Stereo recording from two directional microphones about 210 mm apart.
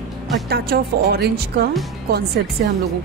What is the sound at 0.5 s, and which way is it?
Music, 50° right (ahead or behind).